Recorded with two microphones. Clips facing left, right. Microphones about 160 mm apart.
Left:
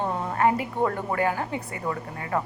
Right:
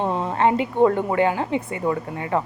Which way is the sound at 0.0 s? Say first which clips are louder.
Right 3 dB; 25° right (ahead or behind).